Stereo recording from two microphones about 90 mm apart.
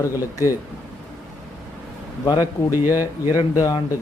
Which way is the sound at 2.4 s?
25° right (ahead or behind).